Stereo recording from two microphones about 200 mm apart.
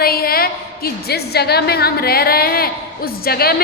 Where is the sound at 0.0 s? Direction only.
50° left (ahead or behind).